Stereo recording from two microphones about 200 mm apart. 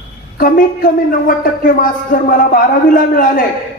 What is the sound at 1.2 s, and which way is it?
A woman's voice, 45° left (ahead or behind).